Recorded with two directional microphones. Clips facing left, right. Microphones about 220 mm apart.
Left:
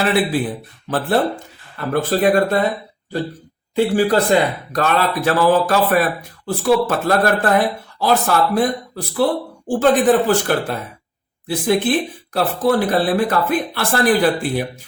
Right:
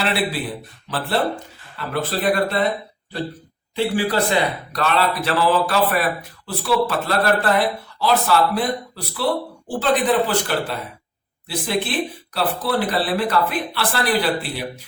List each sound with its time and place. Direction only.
0.0 s speech: 50° left (ahead or behind)
3.9 s speech: 45° left (ahead or behind)